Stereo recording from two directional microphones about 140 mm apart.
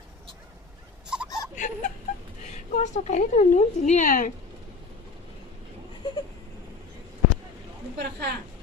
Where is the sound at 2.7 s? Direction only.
55° left (ahead or behind); by 4.3 s 75° left (ahead or behind).